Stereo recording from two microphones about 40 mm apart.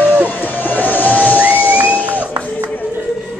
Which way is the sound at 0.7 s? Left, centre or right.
Left.